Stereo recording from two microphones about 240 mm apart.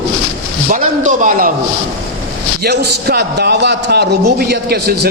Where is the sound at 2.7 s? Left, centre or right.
Right.